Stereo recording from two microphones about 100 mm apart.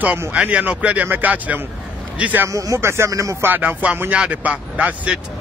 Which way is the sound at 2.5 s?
35° right (ahead or behind).